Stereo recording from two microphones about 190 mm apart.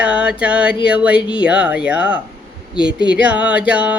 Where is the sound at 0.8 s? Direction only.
5° right (ahead or behind).